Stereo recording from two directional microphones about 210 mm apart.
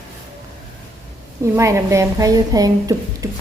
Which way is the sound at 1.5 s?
15° right (ahead or behind).